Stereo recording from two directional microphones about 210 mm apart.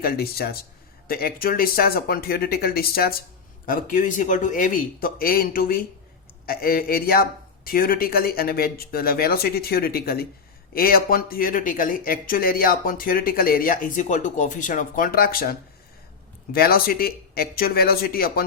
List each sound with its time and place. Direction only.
0.0 s speech: 45° left (ahead or behind)